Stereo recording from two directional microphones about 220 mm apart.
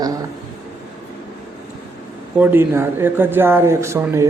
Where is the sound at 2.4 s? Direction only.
10° right (ahead or behind).